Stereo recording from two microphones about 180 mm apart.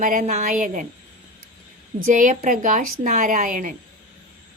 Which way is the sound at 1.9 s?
45° right (ahead or behind).